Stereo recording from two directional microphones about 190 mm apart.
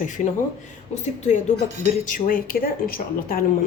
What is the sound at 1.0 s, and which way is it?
Speech, 40° left (ahead or behind).